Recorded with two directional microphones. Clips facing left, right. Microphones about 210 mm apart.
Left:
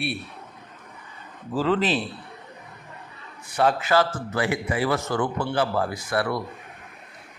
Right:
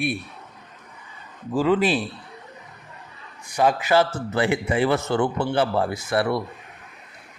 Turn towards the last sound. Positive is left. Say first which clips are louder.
# right 3 dB
turn(degrees=-25)  # may be behind; listen again after turning